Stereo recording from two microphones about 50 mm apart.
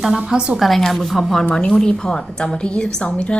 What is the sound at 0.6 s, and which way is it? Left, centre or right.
Speech, centre.